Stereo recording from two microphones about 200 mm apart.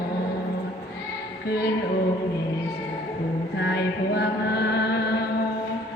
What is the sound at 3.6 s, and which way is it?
Mantra, 55° left (ahead or behind).